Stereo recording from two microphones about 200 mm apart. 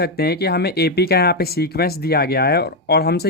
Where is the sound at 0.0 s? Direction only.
50° left (ahead or behind).